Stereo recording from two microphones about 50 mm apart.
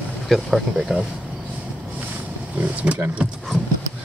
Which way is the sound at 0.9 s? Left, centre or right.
Centre.